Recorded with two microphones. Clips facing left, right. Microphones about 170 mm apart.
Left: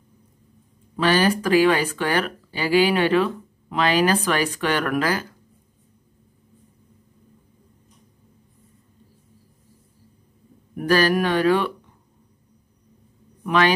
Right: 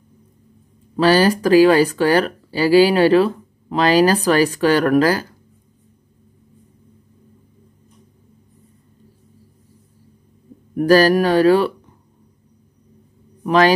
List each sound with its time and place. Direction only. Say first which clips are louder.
0.9 s speech: right 5 dB; 35° right (ahead or behind)
10.8 s speech: right 6 dB; 40° right (ahead or behind)
13.4 s a man's voice: right 5 dB; 35° right (ahead or behind)